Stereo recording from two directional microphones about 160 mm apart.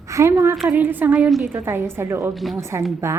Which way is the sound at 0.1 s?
20° right (ahead or behind).